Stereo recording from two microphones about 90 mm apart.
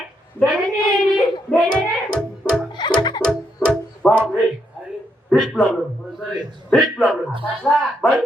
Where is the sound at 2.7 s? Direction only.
55° left (ahead or behind).